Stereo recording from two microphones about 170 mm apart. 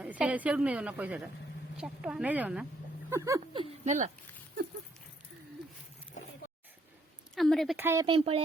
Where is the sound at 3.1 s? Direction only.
15° right (ahead or behind).